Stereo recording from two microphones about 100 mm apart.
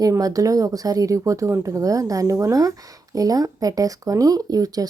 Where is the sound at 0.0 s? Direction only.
35° right (ahead or behind).